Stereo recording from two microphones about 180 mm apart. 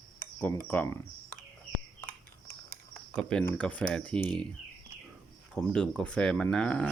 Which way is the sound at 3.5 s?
10° left (ahead or behind).